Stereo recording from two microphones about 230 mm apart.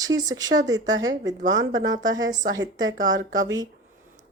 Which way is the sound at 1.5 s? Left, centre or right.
Right.